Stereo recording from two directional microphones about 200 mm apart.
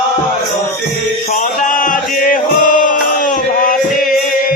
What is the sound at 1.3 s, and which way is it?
Chant, 40° left (ahead or behind).